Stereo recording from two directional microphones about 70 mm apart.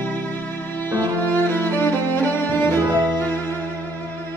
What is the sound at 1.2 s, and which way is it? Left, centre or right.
Music, left.